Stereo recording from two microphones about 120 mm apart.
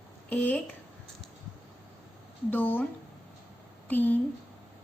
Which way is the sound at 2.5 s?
15° left (ahead or behind).